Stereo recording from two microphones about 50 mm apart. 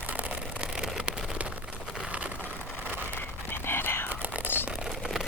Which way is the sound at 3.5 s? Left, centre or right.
Left.